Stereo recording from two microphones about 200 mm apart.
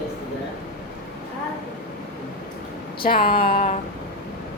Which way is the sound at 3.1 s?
45° left (ahead or behind).